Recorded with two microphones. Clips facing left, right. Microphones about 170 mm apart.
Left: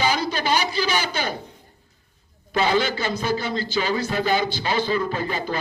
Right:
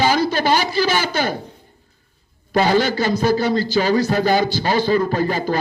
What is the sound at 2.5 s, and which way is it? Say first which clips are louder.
A man's voice: right 5 dB; 40° right (ahead or behind).